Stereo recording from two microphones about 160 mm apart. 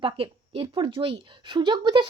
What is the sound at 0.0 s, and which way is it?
A woman's voice, 35° right (ahead or behind).